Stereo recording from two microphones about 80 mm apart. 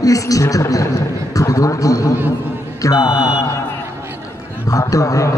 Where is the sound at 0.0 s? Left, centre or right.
Left.